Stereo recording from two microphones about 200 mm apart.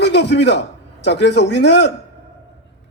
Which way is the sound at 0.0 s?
60° left (ahead or behind).